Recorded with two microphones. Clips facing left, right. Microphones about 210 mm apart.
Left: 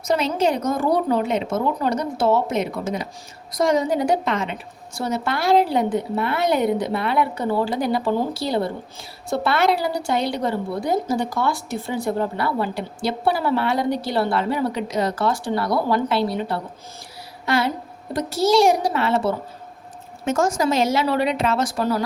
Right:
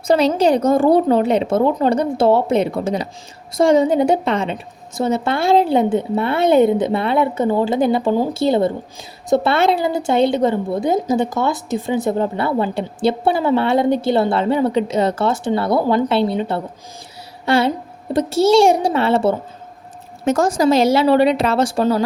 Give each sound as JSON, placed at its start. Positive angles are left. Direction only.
{"t": 0.1, "sound": "a woman's voice", "side_deg": -35}